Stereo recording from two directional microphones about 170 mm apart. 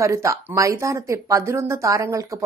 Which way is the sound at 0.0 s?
15° right (ahead or behind).